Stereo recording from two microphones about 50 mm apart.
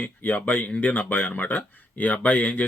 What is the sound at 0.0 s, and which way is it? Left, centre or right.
Speech, left.